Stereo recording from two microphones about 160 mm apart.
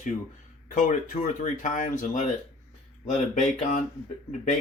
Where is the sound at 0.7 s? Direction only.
50° left (ahead or behind).